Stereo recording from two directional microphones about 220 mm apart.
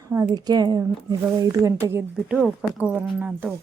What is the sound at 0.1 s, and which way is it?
Speech, 15° right (ahead or behind).